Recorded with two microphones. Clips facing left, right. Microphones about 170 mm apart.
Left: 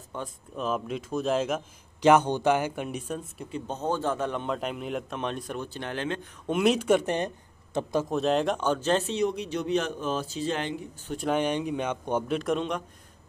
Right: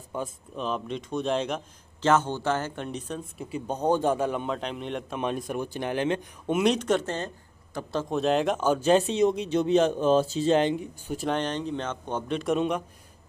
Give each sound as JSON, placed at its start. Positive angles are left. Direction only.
{"t": 0.1, "sound": "speech", "side_deg": -10}
{"t": 0.6, "sound": "speech", "side_deg": 5}
{"t": 2.0, "sound": "speech", "side_deg": 15}
{"t": 3.5, "sound": "speech", "side_deg": -10}
{"t": 4.6, "sound": "speech", "side_deg": 5}
{"t": 6.4, "sound": "a man's voice", "side_deg": 0}
{"t": 8.1, "sound": "speech", "side_deg": 0}
{"t": 11.1, "sound": "speech", "side_deg": 0}
{"t": 11.3, "sound": "speech", "side_deg": 10}
{"t": 12.4, "sound": "speech", "side_deg": -5}